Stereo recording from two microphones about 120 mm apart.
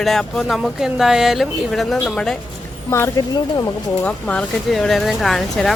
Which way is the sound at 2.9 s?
20° left (ahead or behind).